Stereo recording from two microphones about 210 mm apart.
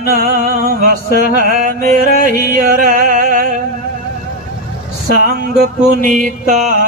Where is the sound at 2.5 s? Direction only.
45° right (ahead or behind).